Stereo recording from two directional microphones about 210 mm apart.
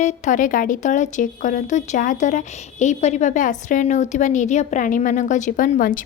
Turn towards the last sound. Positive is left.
turn(degrees=40)  # may be behind; listen again after turning